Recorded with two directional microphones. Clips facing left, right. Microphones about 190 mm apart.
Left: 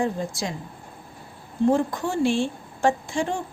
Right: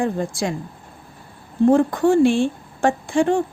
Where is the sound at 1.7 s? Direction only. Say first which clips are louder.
Right 7 dB; 60° right (ahead or behind).